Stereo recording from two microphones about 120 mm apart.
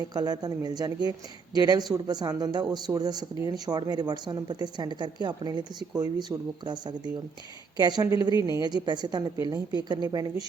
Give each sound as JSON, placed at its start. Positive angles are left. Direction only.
{"t": 0.0, "sound": "a woman's voice", "side_deg": -35}